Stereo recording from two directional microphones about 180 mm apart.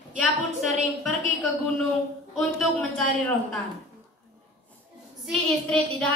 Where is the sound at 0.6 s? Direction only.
Centre (ahead or behind).